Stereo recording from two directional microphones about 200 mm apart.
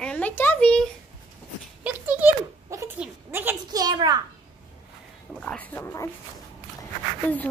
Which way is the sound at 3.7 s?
20° right (ahead or behind).